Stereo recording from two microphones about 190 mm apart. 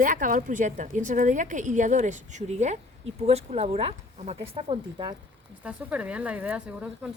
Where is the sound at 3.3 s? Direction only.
35° right (ahead or behind).